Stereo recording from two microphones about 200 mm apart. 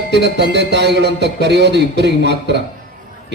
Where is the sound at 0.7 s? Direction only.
60° right (ahead or behind).